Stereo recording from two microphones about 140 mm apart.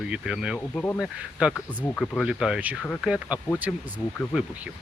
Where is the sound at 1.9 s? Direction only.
10° left (ahead or behind).